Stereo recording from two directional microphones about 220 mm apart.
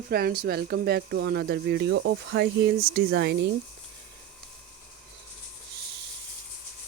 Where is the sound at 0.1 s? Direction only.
45° right (ahead or behind).